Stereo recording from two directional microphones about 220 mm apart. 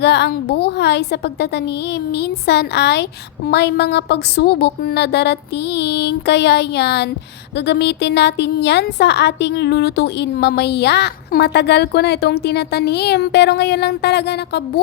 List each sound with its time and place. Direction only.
0.0 s a woman's voice: 50° left (ahead or behind)